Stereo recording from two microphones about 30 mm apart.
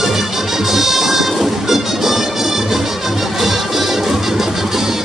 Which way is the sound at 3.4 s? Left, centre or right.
Centre.